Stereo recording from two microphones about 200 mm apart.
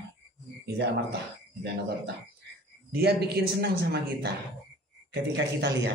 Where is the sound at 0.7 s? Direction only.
55° right (ahead or behind).